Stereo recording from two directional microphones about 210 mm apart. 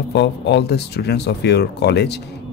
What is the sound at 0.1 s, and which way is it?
Speech, 55° left (ahead or behind).